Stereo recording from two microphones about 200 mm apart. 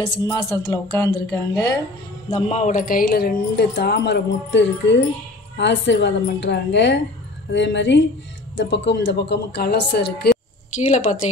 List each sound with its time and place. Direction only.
0.0 s music: 20° left (ahead or behind)
2.2 s a woman's voice: 35° left (ahead or behind); by 10.3 s 55° left (ahead or behind)
10.8 s speech: 35° left (ahead or behind)